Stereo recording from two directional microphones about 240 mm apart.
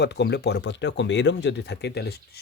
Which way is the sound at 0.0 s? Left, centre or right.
Left.